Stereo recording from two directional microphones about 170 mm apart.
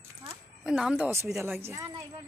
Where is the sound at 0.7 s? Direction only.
5° right (ahead or behind).